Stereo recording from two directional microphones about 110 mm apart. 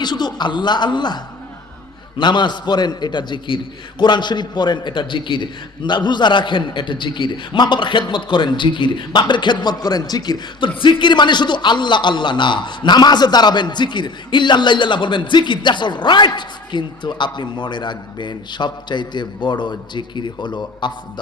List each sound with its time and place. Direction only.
0.0 s a man's voice: 40° left (ahead or behind)